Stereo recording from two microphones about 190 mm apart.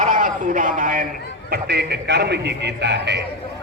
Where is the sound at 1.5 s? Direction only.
60° right (ahead or behind).